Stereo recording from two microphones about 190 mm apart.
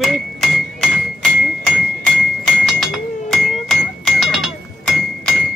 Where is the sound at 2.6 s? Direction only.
Centre (ahead or behind).